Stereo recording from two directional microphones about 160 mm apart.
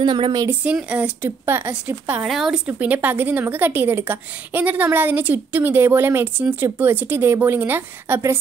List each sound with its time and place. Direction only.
0.0 s speech: 30° right (ahead or behind)
0.5 s speech: 10° right (ahead or behind)